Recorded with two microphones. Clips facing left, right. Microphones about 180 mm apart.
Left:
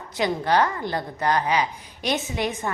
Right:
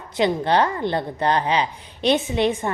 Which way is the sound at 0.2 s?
25° right (ahead or behind).